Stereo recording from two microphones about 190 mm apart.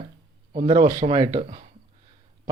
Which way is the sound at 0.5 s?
35° right (ahead or behind).